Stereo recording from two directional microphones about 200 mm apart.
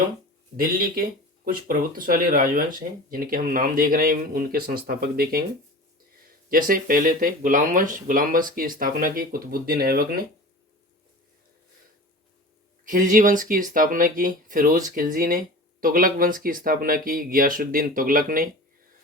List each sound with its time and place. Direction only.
0.5 s speech: 45° right (ahead or behind)
12.8 s speech: 40° right (ahead or behind)